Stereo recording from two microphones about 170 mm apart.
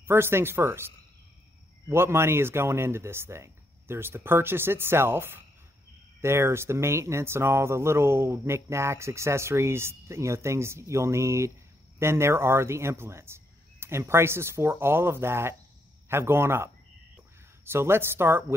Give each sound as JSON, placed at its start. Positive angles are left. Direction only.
{"t": 0.0, "sound": "speech", "side_deg": -15}
{"t": 1.9, "sound": "speech", "side_deg": -15}